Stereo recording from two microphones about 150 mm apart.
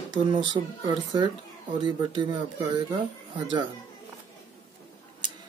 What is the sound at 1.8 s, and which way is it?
Speech, 30° right (ahead or behind).